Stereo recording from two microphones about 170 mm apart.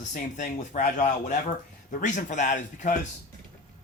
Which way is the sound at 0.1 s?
50° left (ahead or behind).